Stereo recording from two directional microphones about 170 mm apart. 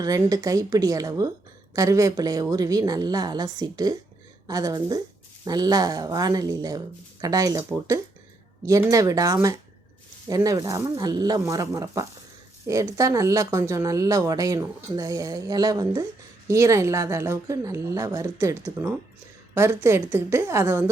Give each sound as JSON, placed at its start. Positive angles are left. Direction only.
{"t": 0.0, "sound": "a woman's voice", "side_deg": -20}